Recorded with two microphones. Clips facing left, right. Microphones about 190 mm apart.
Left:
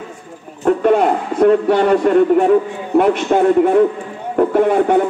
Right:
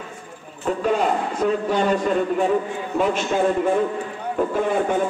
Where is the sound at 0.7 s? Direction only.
60° left (ahead or behind).